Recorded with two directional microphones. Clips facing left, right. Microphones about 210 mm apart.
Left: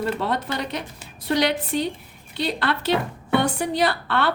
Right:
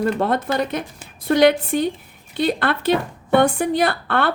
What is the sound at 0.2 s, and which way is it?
A woman's voice, 50° right (ahead or behind).